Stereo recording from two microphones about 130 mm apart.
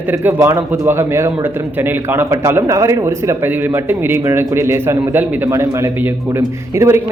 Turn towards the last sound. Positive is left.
turn(degrees=-20)  # may be behind; listen again after turning